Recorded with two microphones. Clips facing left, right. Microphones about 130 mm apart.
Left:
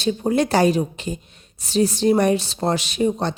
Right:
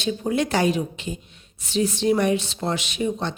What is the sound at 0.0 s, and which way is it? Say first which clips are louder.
Speech: left 4 dB; 40° left (ahead or behind).